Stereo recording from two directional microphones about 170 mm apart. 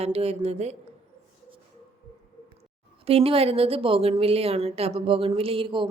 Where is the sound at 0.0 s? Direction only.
35° right (ahead or behind).